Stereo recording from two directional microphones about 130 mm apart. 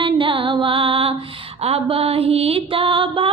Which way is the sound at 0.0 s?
40° right (ahead or behind).